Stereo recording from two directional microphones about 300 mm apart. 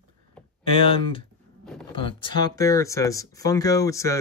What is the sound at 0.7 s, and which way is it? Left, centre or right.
Speech, centre.